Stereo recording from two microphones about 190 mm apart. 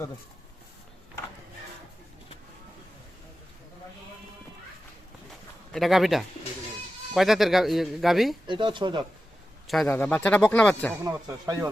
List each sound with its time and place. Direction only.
5.7 s speech: centre (ahead or behind)
8.4 s speech: 25° right (ahead or behind)
9.6 s speech: centre (ahead or behind)
11.0 s speech: 20° right (ahead or behind)